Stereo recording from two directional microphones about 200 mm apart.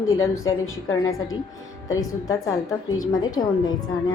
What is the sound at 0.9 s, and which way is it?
A woman's voice, 15° left (ahead or behind).